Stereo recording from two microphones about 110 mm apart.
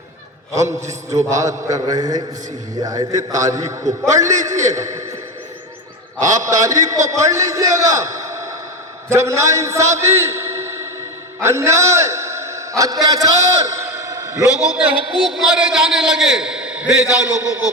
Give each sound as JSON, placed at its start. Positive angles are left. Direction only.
{"t": 0.5, "sound": "a man's voice", "side_deg": -30}
{"t": 6.2, "sound": "a man's voice", "side_deg": -30}
{"t": 13.8, "sound": "a sound", "side_deg": -25}
{"t": 15.3, "sound": "a man's voice", "side_deg": -5}